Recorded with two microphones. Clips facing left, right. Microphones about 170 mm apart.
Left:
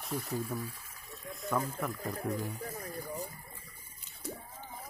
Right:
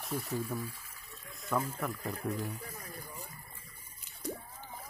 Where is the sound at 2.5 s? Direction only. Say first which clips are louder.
Left 5 dB; 40° left (ahead or behind).